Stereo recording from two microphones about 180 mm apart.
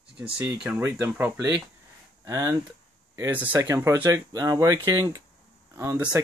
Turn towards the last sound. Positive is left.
turn(degrees=-15)  # may be behind; listen again after turning